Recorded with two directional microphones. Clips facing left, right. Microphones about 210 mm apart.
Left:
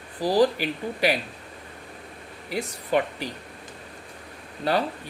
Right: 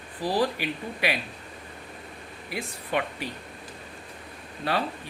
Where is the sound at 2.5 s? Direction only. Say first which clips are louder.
Left 5 dB; 40° left (ahead or behind).